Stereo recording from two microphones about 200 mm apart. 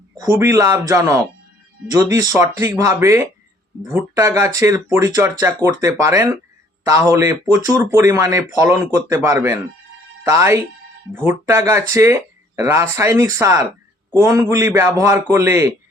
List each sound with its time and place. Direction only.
0.3 s speech: 15° right (ahead or behind)